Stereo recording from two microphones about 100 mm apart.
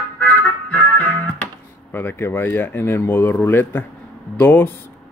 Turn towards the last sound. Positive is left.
turn(degrees=20)  # may be behind; listen again after turning